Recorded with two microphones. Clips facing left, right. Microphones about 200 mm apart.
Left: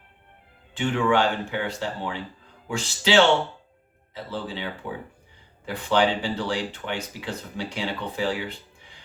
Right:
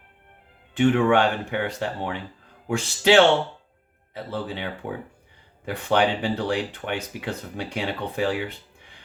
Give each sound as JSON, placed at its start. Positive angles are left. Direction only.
{"t": 0.8, "sound": "speech", "side_deg": -60}